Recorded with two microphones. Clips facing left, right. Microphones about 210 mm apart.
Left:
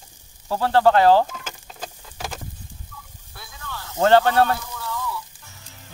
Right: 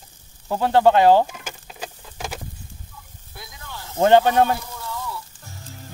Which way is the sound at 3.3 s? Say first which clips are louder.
Left 1 dB; 15° right (ahead or behind).